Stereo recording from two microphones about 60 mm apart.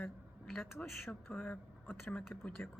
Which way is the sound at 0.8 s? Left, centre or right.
Left.